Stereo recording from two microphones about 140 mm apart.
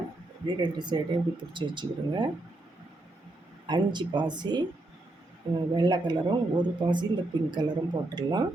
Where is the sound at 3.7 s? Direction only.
30° right (ahead or behind).